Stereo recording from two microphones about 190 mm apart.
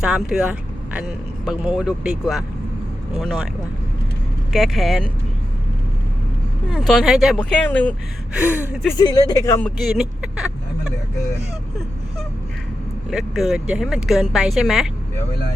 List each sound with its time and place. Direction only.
0.0 s speech: 5° right (ahead or behind)
4.5 s speech: centre (ahead or behind)
6.7 s speech: centre (ahead or behind)
8.3 s speech: 10° right (ahead or behind)
9.0 s speech: 20° left (ahead or behind)
9.6 s speech: 5° left (ahead or behind)
13.1 s speech: centre (ahead or behind)